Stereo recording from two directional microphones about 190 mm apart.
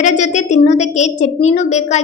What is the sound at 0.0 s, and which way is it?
A woman's voice, 40° left (ahead or behind).